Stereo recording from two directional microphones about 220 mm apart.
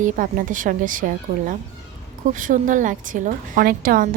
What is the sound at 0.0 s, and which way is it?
A woman's voice, 35° right (ahead or behind).